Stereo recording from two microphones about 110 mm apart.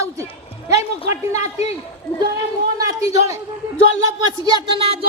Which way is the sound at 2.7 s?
30° right (ahead or behind).